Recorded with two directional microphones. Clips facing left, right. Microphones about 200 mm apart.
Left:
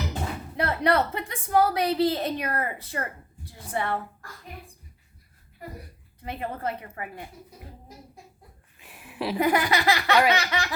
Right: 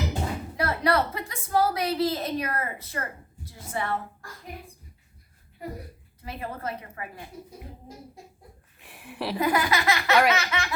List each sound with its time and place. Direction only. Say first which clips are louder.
0.5 s a woman's voice: left 1 dB; 25° left (ahead or behind)
6.2 s a woman's voice: left 3 dB; 30° left (ahead or behind)
8.8 s speech: left 2 dB; centre (ahead or behind)
9.4 s a sound: left 2 dB; 30° left (ahead or behind)